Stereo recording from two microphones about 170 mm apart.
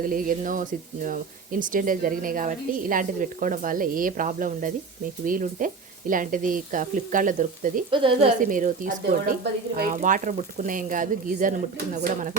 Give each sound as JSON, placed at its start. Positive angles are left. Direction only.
{"t": 0.0, "sound": "speech", "side_deg": -55}
{"t": 7.9, "sound": "speech", "side_deg": -30}
{"t": 8.4, "sound": "speech", "side_deg": -50}
{"t": 9.4, "sound": "speech", "side_deg": -65}
{"t": 9.9, "sound": "speech", "side_deg": -50}